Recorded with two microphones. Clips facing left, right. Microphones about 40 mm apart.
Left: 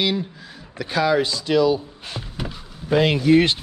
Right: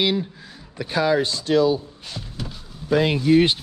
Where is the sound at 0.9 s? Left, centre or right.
Left.